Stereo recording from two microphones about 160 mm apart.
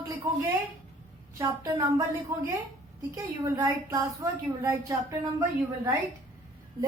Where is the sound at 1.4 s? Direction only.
20° right (ahead or behind).